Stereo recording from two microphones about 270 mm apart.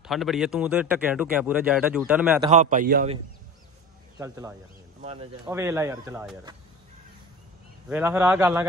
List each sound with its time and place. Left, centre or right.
0.0 s speech: centre
2.5 s a man's voice: right
4.2 s speech: centre
5.0 s a man's voice: right
5.5 s speech: centre
7.9 s speech: centre